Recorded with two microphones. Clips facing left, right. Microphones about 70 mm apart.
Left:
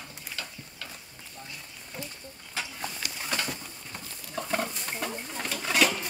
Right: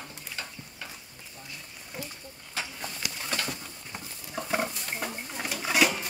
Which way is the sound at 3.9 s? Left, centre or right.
Centre.